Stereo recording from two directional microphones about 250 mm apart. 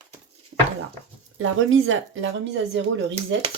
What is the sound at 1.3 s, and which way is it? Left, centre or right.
Speech, right.